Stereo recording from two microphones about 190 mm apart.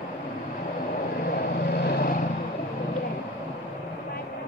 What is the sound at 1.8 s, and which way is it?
Vehicle, 55° left (ahead or behind).